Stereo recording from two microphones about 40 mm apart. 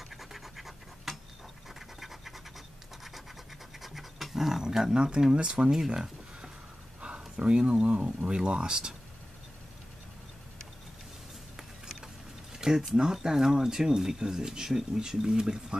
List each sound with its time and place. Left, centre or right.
0.1 s scratch: centre
3.8 s pant: centre
4.9 s speech: right
5.9 s a sound: centre
7.8 s speech: right
12.5 s speech: centre